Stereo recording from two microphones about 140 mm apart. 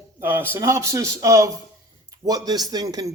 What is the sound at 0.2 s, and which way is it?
Speech, 15° right (ahead or behind).